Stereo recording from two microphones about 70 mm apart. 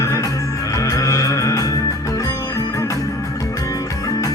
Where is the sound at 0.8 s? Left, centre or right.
Left.